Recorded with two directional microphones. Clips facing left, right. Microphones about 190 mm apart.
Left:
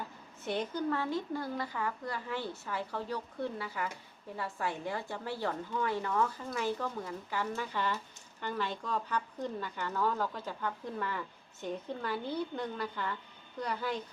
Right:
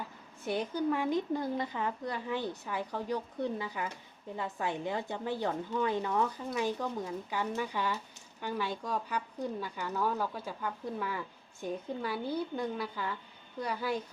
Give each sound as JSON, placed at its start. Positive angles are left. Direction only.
{"t": 0.4, "sound": "speech", "side_deg": -10}